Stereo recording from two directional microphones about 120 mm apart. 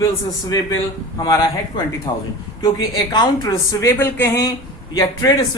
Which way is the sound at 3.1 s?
35° left (ahead or behind).